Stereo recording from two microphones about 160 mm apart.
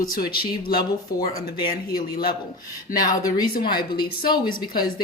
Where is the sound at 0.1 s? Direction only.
70° left (ahead or behind).